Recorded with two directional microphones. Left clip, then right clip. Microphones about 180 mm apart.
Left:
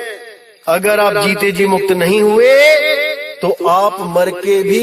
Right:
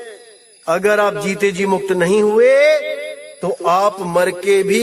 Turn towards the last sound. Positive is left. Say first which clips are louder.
# left 2 dB
turn(degrees=10)  # may be behind; listen again after turning